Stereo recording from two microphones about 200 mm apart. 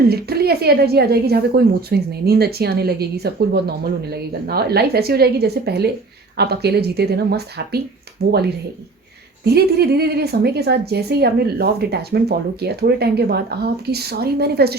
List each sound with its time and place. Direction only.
0.1 s a woman's voice: 50° right (ahead or behind)
9.4 s a woman's voice: 55° right (ahead or behind)